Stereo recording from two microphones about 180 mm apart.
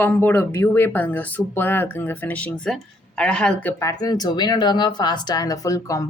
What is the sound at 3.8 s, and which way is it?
Speech, 20° left (ahead or behind).